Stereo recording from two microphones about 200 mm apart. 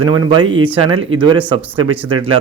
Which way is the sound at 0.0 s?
20° right (ahead or behind).